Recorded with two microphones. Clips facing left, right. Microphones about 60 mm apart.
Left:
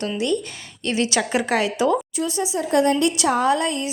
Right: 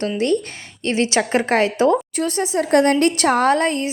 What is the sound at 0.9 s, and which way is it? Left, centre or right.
A woman's voice, right.